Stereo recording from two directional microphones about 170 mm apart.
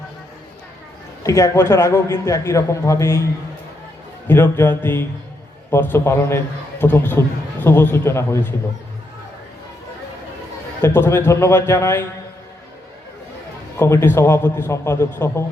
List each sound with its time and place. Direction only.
1.2 s a man's voice: 15° left (ahead or behind)
4.3 s a man's voice: 10° left (ahead or behind)
10.8 s a man's voice: 15° left (ahead or behind)
13.7 s a man's voice: 15° left (ahead or behind)